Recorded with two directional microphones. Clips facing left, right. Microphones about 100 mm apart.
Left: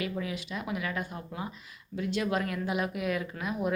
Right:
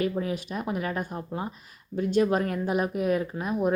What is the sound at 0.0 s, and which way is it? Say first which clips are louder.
A woman's voice: right 6 dB; 40° right (ahead or behind).